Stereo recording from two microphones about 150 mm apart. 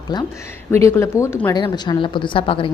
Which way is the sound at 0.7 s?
20° left (ahead or behind).